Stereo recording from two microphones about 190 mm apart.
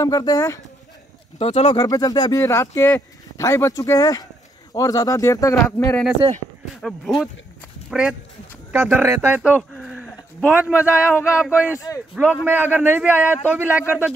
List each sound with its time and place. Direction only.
0.0 s speech: 20° left (ahead or behind)
1.4 s speech: 35° left (ahead or behind)
1.8 s speech: 20° left (ahead or behind)
6.8 s speech: centre (ahead or behind)